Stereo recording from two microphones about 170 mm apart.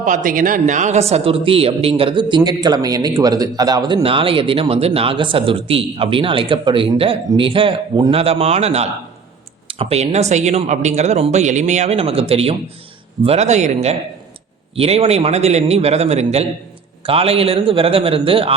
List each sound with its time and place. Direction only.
0.0 s speech: 50° right (ahead or behind); by 18.5 s 35° right (ahead or behind)